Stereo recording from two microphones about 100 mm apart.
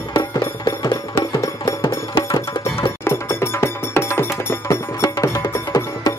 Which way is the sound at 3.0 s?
25° left (ahead or behind).